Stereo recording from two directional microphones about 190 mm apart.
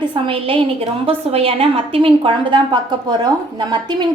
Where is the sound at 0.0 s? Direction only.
30° right (ahead or behind).